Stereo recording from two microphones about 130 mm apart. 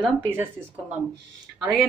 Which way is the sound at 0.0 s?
15° right (ahead or behind).